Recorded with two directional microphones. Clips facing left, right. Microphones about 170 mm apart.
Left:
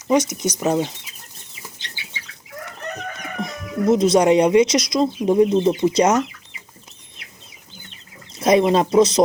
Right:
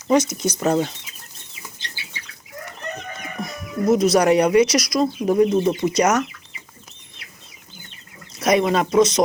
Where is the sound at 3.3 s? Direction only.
25° left (ahead or behind).